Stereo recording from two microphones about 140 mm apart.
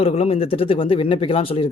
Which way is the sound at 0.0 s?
45° left (ahead or behind).